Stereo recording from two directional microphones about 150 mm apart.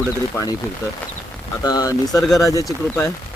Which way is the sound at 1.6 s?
25° left (ahead or behind).